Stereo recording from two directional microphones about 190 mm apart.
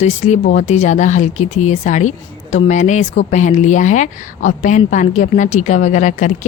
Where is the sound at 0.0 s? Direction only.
40° left (ahead or behind).